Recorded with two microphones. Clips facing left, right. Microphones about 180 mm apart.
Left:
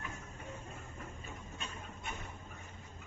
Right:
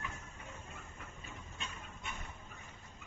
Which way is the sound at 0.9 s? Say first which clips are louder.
Left 3 dB; 40° left (ahead or behind).